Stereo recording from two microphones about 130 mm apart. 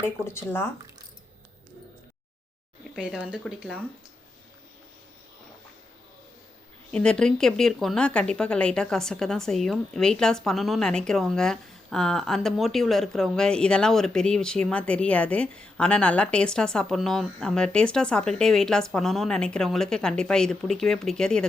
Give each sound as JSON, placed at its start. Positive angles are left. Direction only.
{"t": 0.0, "sound": "speech", "side_deg": 20}
{"t": 2.9, "sound": "speech", "side_deg": 0}
{"t": 6.9, "sound": "speech", "side_deg": 5}